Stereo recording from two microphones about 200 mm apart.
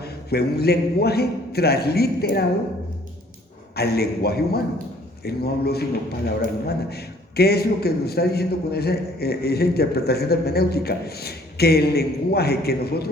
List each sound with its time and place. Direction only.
0.0 s a man's voice: 55° left (ahead or behind)
3.8 s a man's voice: 50° left (ahead or behind)